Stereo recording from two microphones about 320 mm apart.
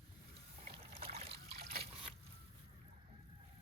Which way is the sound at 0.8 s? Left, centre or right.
Right.